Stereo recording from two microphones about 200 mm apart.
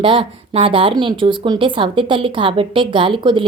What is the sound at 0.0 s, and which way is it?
Speech, 25° right (ahead or behind).